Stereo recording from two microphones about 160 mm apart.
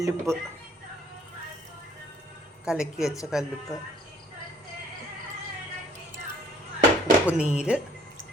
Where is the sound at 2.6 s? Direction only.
5° right (ahead or behind).